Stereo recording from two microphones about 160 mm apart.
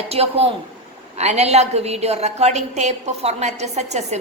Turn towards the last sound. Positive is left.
turn(degrees=-45)  # may be behind; listen again after turning